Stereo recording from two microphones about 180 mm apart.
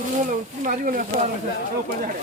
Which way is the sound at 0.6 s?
50° right (ahead or behind).